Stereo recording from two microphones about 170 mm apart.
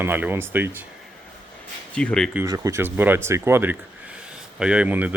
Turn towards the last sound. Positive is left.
turn(degrees=-10)  # may be behind; listen again after turning